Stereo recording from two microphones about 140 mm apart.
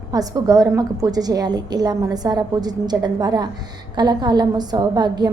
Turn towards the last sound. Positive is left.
turn(degrees=-30)  # may be behind; listen again after turning